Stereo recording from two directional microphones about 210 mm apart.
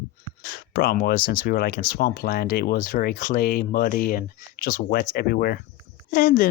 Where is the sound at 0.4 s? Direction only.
45° left (ahead or behind).